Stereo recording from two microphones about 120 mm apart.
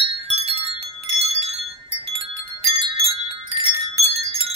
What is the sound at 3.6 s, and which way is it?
Wind chime, 60° right (ahead or behind).